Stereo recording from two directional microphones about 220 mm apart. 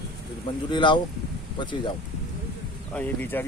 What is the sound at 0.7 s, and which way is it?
Speech, 20° left (ahead or behind).